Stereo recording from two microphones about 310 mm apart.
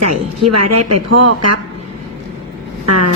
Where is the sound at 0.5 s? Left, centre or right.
Right.